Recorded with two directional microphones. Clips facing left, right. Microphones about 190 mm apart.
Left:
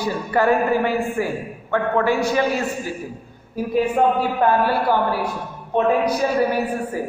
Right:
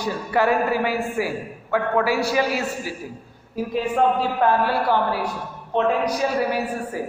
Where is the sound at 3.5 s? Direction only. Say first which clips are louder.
Left 3 dB; 5° left (ahead or behind).